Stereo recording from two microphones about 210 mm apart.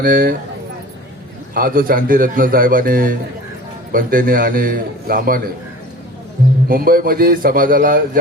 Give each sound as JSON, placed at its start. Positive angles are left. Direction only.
{"t": 0.0, "sound": "a man's voice", "side_deg": -45}
{"t": 1.5, "sound": "a man's voice", "side_deg": -40}
{"t": 6.7, "sound": "a man's voice", "side_deg": -45}